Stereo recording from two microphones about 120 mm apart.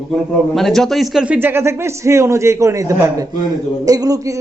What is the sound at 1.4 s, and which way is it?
Speech, 20° right (ahead or behind).